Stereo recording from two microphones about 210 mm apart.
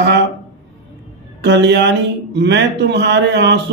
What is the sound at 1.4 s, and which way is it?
Speech, 55° right (ahead or behind).